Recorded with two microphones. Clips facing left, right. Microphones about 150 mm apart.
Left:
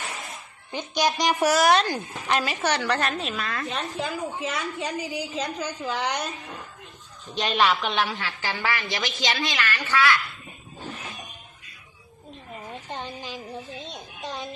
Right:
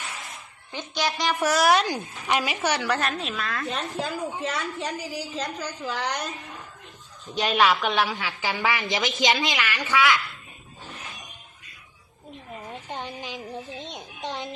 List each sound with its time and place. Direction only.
0.7 s a woman's voice: 15° left (ahead or behind)
1.5 s a woman's voice: 5° right (ahead or behind)
7.3 s a woman's voice: 10° right (ahead or behind)
12.9 s a woman's voice: 15° right (ahead or behind)
13.8 s a sound: 20° right (ahead or behind)